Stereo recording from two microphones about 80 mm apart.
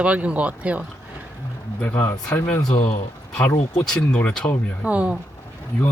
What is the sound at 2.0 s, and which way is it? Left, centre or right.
Speech, left.